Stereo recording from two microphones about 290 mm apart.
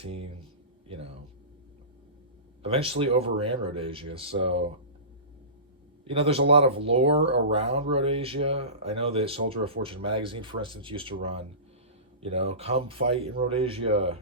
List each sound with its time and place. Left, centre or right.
0.0 s speech: centre
2.6 s speech: centre
6.1 s speech: centre